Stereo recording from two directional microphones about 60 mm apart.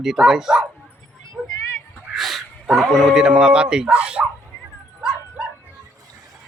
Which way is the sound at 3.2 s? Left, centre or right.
Centre.